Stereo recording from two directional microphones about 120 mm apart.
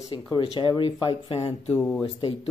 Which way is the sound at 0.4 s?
40° left (ahead or behind).